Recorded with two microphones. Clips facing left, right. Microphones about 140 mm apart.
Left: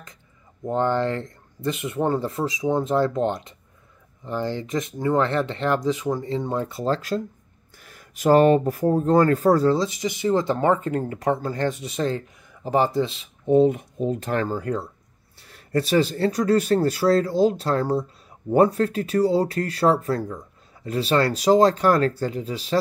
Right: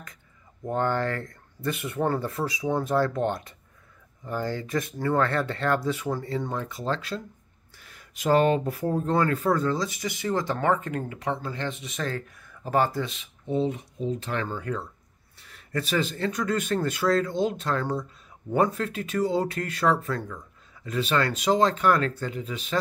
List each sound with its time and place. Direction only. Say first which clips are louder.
0.7 s speech: left 4 dB; 25° left (ahead or behind)
12.4 s speech: left 2 dB; 20° left (ahead or behind)
13.0 s speech: left 7 dB; 30° left (ahead or behind)
13.5 s speech: left 9 dB; 55° left (ahead or behind); by 22.8 s 35° left (ahead or behind)